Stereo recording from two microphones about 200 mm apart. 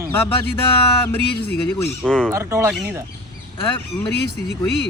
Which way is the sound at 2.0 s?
Centre (ahead or behind).